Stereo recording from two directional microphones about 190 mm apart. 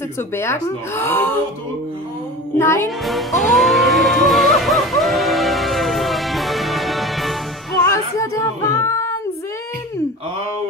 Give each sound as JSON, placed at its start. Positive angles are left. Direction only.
{"t": 0.4, "sound": "speech", "side_deg": 15}
{"t": 2.6, "sound": "speech", "side_deg": 15}
{"t": 3.1, "sound": "music", "side_deg": 0}
{"t": 7.8, "sound": "music", "side_deg": 15}